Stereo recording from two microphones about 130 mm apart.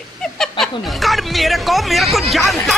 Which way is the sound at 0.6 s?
Centre (ahead or behind).